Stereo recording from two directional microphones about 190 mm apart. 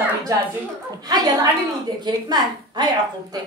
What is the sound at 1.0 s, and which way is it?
A woman's voice, 20° right (ahead or behind).